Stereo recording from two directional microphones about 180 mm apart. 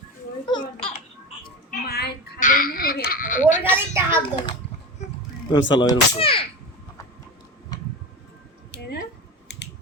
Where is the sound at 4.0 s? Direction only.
15° right (ahead or behind).